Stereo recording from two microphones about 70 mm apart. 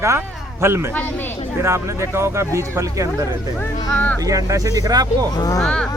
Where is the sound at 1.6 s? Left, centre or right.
Right.